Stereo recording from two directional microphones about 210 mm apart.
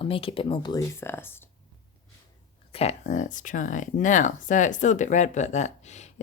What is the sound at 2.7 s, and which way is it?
Speech, 30° left (ahead or behind).